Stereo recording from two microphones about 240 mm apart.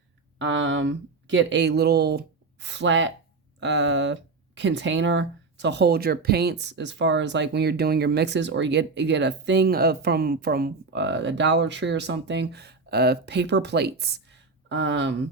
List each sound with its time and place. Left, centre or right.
0.3 s speech: right